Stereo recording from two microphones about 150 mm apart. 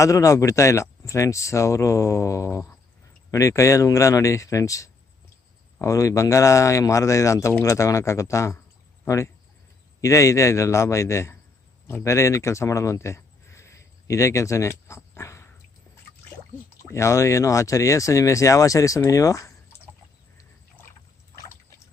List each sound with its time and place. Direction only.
0.0 s speech: 20° left (ahead or behind)
16.9 s speech: 20° left (ahead or behind)